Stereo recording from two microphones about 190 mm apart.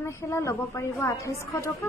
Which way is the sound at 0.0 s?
15° left (ahead or behind).